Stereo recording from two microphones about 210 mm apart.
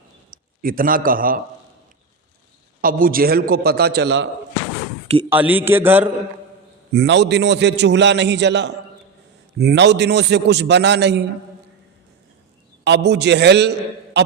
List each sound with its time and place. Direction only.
0.3 s a man's voice: 40° right (ahead or behind)
2.8 s a man's voice: 45° right (ahead or behind)
5.3 s a man's voice: 10° right (ahead or behind)
6.9 s a man's voice: 55° right (ahead or behind)
12.8 s a man's voice: 55° right (ahead or behind)